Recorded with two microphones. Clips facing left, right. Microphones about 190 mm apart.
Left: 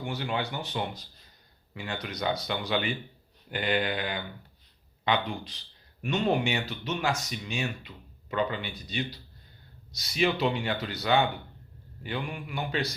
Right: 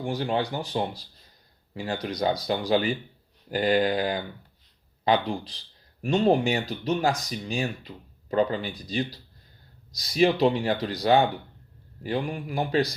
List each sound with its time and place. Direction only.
0.0 s speech: 35° right (ahead or behind)